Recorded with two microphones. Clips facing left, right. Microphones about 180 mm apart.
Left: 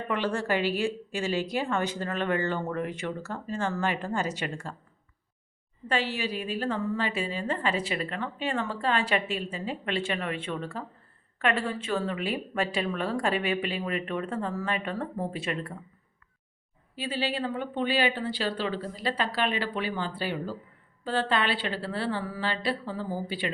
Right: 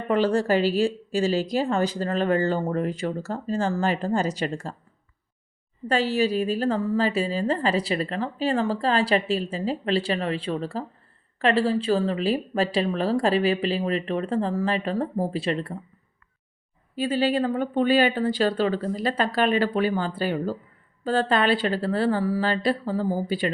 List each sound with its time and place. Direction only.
0.1 s a woman's voice: 35° right (ahead or behind)
5.9 s a woman's voice: 40° right (ahead or behind)
16.9 s speech: 45° right (ahead or behind)